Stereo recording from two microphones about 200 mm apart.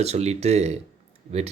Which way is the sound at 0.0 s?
30° right (ahead or behind).